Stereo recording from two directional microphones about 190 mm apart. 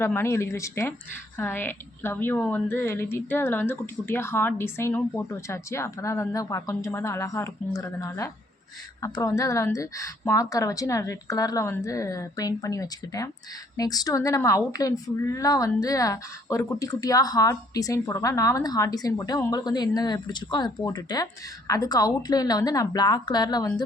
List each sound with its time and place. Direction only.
0.0 s a woman's voice: 15° left (ahead or behind)